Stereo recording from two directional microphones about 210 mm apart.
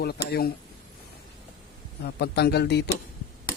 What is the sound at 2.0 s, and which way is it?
Speech, 50° left (ahead or behind).